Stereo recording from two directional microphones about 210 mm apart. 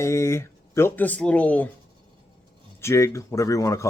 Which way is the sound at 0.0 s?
15° left (ahead or behind).